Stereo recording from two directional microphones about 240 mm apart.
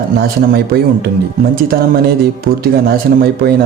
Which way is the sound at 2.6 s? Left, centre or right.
Right.